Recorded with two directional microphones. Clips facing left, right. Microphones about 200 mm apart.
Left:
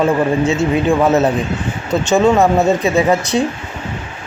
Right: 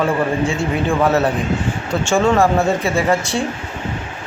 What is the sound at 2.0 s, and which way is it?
A man's voice, 20° left (ahead or behind).